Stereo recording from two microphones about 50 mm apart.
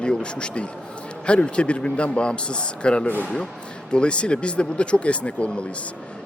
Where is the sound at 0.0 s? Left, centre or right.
Centre.